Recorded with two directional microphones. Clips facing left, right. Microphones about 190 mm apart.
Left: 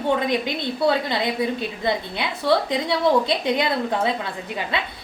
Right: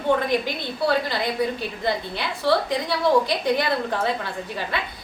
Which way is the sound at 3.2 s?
20° left (ahead or behind).